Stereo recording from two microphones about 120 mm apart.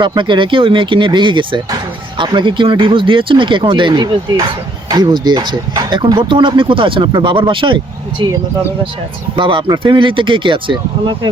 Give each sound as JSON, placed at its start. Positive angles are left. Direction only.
{"t": 0.0, "sound": "speech", "side_deg": -40}